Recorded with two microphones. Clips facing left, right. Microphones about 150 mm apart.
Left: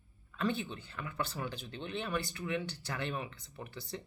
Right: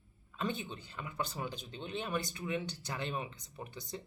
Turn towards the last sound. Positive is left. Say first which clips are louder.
# left 1 dB
turn(degrees=-15)  # may be behind; listen again after turning